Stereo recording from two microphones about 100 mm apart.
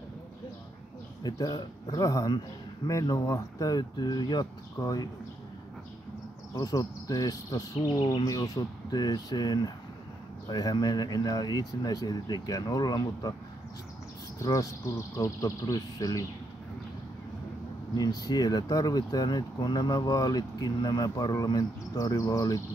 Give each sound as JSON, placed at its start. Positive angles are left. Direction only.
{"t": 1.2, "sound": "speech", "side_deg": 40}
{"t": 6.5, "sound": "speech", "side_deg": 40}
{"t": 14.4, "sound": "speech", "side_deg": 35}
{"t": 17.9, "sound": "speech", "side_deg": 40}